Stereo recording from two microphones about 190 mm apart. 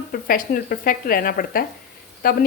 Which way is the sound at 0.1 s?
50° left (ahead or behind).